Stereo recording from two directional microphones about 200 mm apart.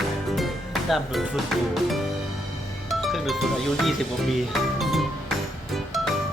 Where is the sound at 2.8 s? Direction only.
Centre (ahead or behind).